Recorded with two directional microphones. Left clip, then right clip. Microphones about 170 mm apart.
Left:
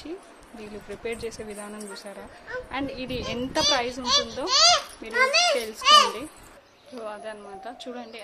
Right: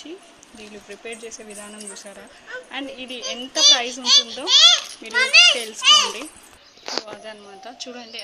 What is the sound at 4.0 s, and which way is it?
A child's voice, 30° left (ahead or behind).